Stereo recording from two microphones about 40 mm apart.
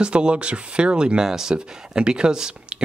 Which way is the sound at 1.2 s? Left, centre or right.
Centre.